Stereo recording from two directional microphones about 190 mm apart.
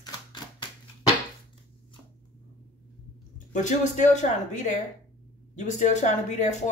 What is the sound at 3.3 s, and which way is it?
Speech, 40° left (ahead or behind).